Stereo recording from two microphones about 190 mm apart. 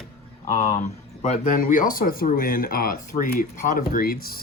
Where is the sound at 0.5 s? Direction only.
40° left (ahead or behind).